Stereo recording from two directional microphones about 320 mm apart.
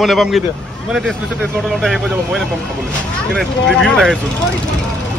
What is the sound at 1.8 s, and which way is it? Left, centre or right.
A man's voice, centre.